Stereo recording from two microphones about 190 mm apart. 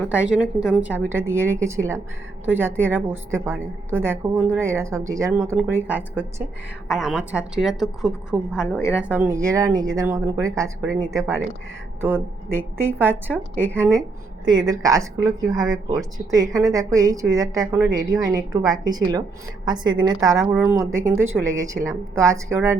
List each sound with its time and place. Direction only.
0.1 s a woman's voice: 5° right (ahead or behind)
14.7 s a woman's voice: 20° right (ahead or behind)